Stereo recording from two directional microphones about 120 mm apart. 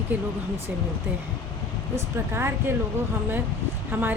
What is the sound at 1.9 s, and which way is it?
Speech, 20° right (ahead or behind).